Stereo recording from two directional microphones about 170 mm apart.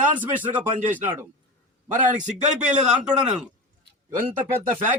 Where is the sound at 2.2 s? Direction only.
45° right (ahead or behind).